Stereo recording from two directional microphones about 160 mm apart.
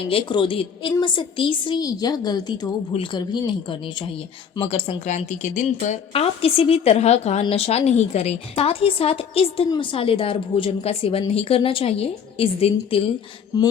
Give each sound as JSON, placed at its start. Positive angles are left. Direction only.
{"t": 0.1, "sound": "speech", "side_deg": 35}